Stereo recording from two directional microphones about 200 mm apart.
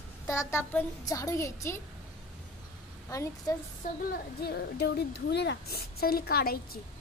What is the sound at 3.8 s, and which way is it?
Speech, 50° left (ahead or behind).